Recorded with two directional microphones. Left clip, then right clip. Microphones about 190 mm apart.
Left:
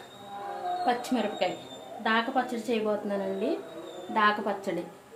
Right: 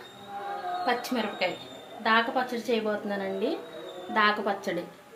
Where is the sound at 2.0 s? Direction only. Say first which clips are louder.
Right 2 dB; 20° left (ahead or behind).